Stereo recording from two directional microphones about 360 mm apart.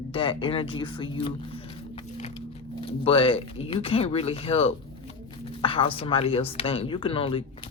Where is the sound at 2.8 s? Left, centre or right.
Centre.